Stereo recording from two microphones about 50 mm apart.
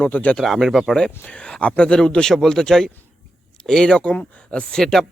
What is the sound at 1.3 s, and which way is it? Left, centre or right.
Speech, left.